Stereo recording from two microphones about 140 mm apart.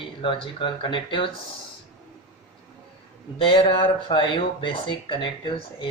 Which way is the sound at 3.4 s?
40° left (ahead or behind).